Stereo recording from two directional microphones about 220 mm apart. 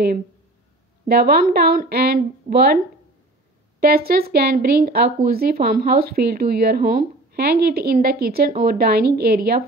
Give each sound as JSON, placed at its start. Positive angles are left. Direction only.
{"t": 1.0, "sound": "speech", "side_deg": -45}
{"t": 3.8, "sound": "speech", "side_deg": -45}